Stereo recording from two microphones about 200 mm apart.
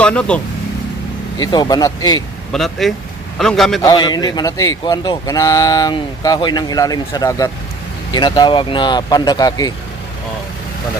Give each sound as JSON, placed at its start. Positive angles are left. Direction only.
{"t": 0.0, "sound": "speech", "side_deg": 5}
{"t": 1.5, "sound": "a man's voice", "side_deg": 20}
{"t": 2.5, "sound": "a man's voice", "side_deg": 0}
{"t": 3.8, "sound": "a man's voice", "side_deg": 20}